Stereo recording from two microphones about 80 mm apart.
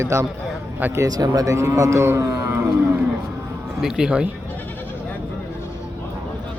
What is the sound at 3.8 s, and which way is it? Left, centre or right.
Speech, centre.